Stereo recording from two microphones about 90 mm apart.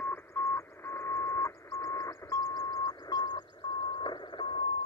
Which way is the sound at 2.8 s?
50° left (ahead or behind).